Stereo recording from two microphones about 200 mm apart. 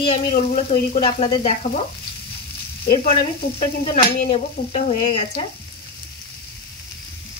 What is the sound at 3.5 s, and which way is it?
Speech, 30° left (ahead or behind).